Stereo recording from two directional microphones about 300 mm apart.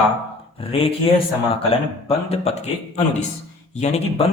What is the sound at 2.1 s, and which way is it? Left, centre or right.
Speech, centre.